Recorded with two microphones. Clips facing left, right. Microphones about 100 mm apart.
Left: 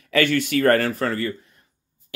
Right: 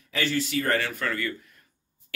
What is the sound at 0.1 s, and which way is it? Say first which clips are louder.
Speech: left 7 dB; 60° left (ahead or behind).